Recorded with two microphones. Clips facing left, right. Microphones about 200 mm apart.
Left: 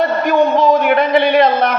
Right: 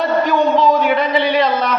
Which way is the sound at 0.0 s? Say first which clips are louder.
Left 2 dB; 50° left (ahead or behind).